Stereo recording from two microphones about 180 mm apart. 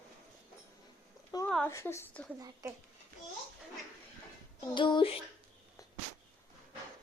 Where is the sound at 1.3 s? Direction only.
20° left (ahead or behind).